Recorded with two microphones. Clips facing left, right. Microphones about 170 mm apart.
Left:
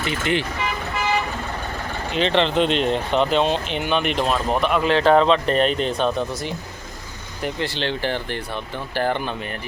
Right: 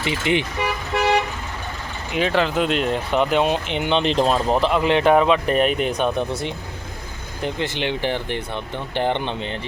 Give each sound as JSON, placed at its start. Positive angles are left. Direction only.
{"t": 0.0, "sound": "speech", "side_deg": -15}
{"t": 0.9, "sound": "vehicle", "side_deg": -65}
{"t": 2.1, "sound": "speech", "side_deg": -5}
{"t": 7.4, "sound": "speech", "side_deg": -20}